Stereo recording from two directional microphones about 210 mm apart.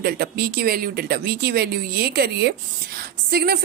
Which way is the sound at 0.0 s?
50° right (ahead or behind).